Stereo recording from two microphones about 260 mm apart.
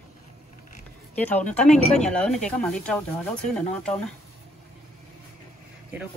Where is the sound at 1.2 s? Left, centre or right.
Centre.